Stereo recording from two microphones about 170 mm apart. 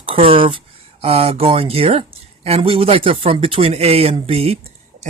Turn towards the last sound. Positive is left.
turn(degrees=-35)  # may be behind; listen again after turning